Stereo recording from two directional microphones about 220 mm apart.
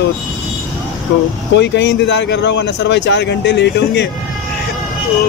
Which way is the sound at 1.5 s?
55° left (ahead or behind).